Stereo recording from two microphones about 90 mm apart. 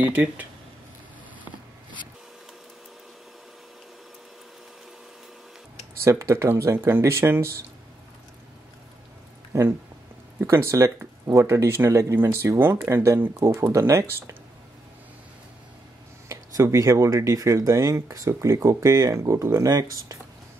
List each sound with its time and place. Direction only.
0.0 s speech: 20° right (ahead or behind)
6.0 s speech: 35° right (ahead or behind)
9.5 s speech: 30° right (ahead or behind)
16.3 s speech: 35° right (ahead or behind)